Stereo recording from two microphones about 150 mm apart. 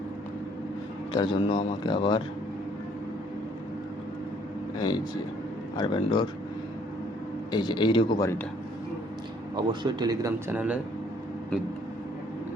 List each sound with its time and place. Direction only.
1.1 s speech: 30° left (ahead or behind)
5.7 s speech: 30° left (ahead or behind)
7.5 s speech: 30° left (ahead or behind)
9.6 s speech: 30° right (ahead or behind)
10.5 s a man's voice: 10° right (ahead or behind)